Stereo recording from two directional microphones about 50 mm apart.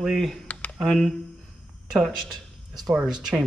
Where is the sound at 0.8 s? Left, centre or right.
Centre.